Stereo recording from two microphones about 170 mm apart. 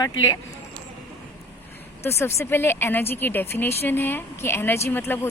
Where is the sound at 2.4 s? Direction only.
15° left (ahead or behind).